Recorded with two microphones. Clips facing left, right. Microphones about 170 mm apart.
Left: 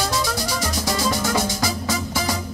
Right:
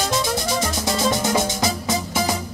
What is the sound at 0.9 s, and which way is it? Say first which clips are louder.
Music: right 2 dB; 20° right (ahead or behind).